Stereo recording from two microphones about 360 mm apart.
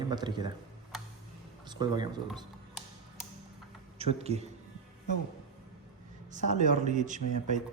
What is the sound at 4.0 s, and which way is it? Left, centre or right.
Speech, centre.